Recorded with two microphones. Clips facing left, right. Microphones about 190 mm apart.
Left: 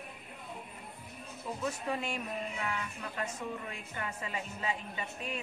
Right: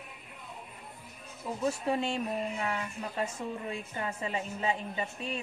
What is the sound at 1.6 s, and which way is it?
Speech, 30° right (ahead or behind).